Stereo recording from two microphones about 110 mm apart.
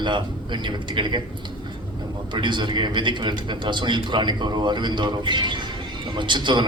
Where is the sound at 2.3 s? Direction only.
45° right (ahead or behind).